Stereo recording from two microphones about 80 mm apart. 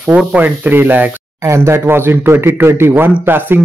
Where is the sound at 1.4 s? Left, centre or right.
Right.